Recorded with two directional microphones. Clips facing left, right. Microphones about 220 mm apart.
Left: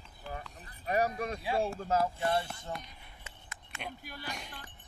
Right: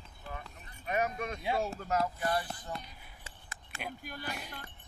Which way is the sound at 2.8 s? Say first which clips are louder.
Even; 5° right (ahead or behind).